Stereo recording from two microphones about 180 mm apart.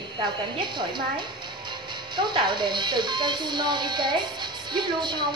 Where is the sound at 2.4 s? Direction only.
25° right (ahead or behind).